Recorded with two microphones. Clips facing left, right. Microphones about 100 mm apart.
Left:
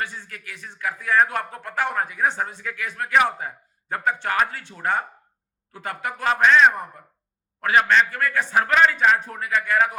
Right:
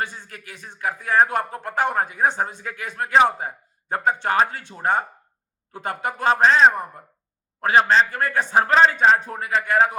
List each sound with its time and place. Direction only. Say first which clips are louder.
0.0 s a man's voice: right 1 dB; 20° right (ahead or behind)
8.1 s speech: right 2 dB; 20° right (ahead or behind)